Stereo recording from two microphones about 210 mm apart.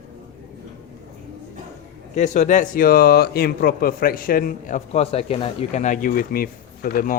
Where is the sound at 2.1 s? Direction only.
35° left (ahead or behind).